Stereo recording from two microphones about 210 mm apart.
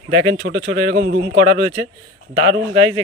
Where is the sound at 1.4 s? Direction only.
20° left (ahead or behind).